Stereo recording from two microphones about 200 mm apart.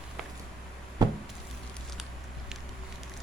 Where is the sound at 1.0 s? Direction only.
20° right (ahead or behind).